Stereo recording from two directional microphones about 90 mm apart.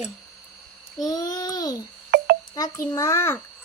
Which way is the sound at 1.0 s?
40° left (ahead or behind).